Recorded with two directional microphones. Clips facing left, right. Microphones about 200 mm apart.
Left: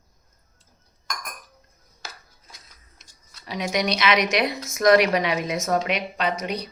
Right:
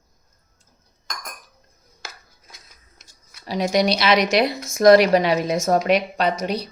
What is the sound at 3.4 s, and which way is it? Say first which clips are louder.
A woman's voice: right 6 dB; 35° right (ahead or behind).